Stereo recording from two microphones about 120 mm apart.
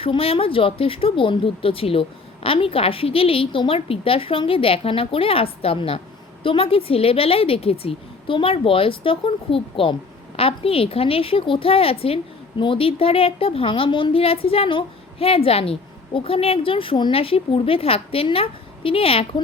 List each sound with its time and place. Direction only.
0.0 s a woman's voice: 50° left (ahead or behind)